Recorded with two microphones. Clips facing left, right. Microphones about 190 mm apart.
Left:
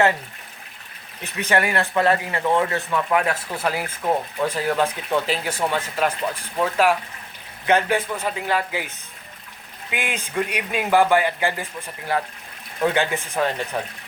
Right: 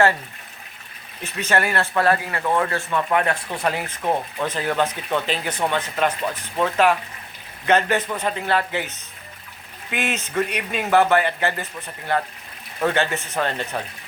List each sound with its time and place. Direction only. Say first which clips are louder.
1.2 s speech: even; 15° left (ahead or behind)
2.9 s speech: right 1 dB; 5° left (ahead or behind)
9.9 s speech: right 2 dB; 10° left (ahead or behind)